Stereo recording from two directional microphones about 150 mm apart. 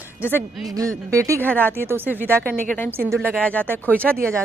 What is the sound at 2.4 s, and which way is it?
A woman's voice, 10° left (ahead or behind).